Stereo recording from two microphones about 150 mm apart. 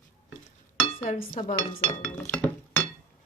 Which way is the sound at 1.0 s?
60° left (ahead or behind).